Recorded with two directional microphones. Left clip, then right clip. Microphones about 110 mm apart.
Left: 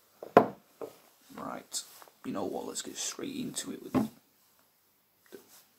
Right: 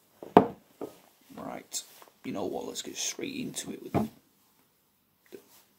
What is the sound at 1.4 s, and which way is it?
Speech, 25° right (ahead or behind).